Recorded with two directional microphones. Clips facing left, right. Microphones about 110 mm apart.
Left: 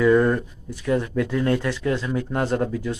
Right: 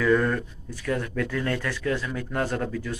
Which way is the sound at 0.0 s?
20° left (ahead or behind).